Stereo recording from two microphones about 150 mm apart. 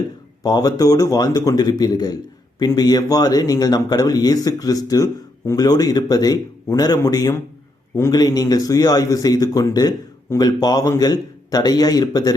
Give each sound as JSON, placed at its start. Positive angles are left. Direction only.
{"t": 0.4, "sound": "speech", "side_deg": 25}